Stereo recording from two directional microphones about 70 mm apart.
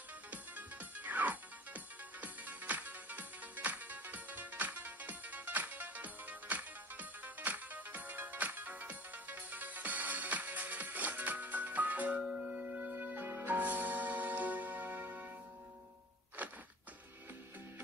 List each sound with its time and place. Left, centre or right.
0.3 s music: right
12.2 s music: centre
16.4 s a sound: right